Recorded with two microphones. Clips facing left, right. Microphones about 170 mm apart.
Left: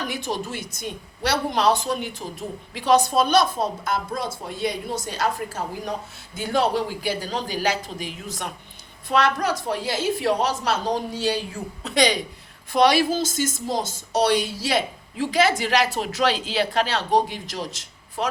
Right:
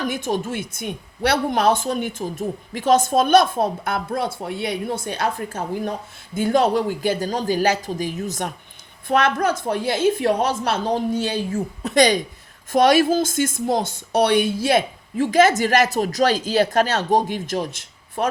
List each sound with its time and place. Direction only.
0.0 s a woman's voice: 50° right (ahead or behind)